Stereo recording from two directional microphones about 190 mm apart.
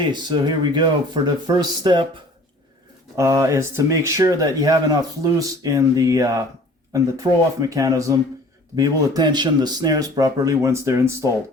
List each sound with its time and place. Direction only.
0.1 s speech: 25° right (ahead or behind)